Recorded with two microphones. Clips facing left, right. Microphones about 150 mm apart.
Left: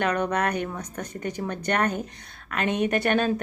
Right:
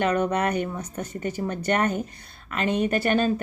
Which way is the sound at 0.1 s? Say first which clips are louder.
Right 2 dB; 10° right (ahead or behind).